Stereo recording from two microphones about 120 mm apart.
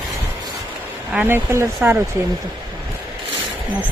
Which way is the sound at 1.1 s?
15° right (ahead or behind).